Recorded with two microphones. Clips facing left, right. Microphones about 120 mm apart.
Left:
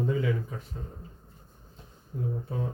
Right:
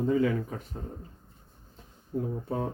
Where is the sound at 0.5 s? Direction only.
50° right (ahead or behind).